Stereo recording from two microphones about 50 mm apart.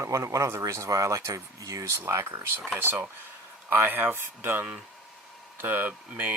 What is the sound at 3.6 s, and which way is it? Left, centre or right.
Speech, right.